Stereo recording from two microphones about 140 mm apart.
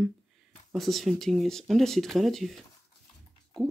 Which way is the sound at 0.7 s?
Centre (ahead or behind).